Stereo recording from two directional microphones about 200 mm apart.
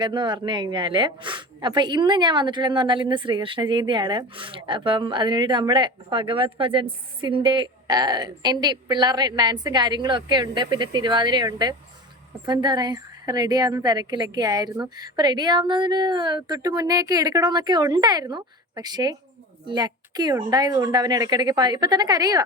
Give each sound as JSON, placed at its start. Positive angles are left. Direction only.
{"t": 0.0, "sound": "a woman's voice", "side_deg": -25}